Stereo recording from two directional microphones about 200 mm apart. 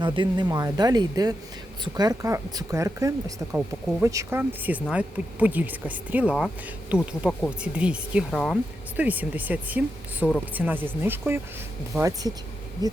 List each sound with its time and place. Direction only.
0.0 s speech: 20° right (ahead or behind)